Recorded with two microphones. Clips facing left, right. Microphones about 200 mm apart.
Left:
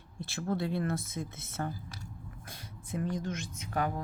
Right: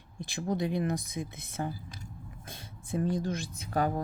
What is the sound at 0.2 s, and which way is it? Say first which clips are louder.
Speech: right 2 dB; 15° right (ahead or behind).